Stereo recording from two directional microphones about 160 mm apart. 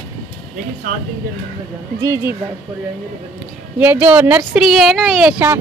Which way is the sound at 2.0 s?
15° right (ahead or behind).